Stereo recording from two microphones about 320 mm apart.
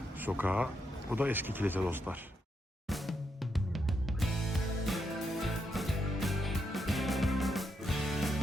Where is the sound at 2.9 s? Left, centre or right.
Centre.